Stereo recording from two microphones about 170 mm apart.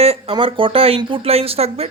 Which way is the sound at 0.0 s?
35° right (ahead or behind).